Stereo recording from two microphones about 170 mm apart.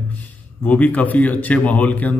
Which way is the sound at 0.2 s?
10° left (ahead or behind).